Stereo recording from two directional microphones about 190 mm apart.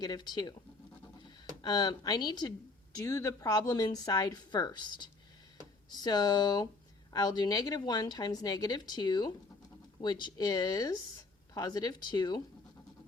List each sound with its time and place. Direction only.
0.0 s speech: 20° left (ahead or behind)
1.6 s speech: 20° left (ahead or behind)